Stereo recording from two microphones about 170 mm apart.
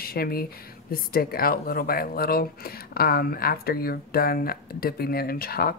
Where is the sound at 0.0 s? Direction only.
65° left (ahead or behind).